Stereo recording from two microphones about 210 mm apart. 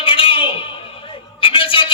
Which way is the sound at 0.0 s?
25° left (ahead or behind).